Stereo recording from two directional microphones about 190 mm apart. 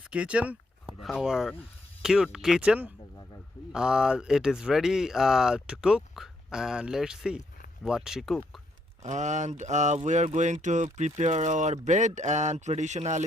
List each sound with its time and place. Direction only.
0.1 s speech: 5° right (ahead or behind)
9.0 s speech: 40° right (ahead or behind)